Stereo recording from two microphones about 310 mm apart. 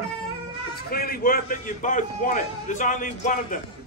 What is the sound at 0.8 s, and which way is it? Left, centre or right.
A man's voice, left.